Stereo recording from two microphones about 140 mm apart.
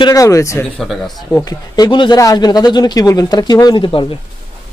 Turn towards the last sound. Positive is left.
turn(degrees=35)  # may be behind; listen again after turning